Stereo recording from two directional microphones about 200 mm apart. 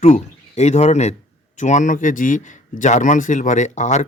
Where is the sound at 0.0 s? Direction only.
35° left (ahead or behind).